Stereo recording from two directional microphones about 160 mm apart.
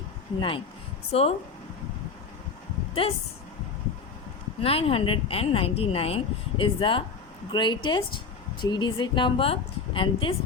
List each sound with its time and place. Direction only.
0.3 s speech: 30° left (ahead or behind)
3.0 s speech: 35° left (ahead or behind)
4.6 s speech: 35° left (ahead or behind)